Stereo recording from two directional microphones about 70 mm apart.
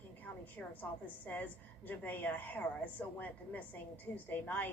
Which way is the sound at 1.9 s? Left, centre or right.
Left.